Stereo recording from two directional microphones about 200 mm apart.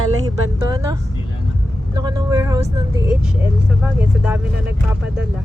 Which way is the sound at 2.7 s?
15° right (ahead or behind).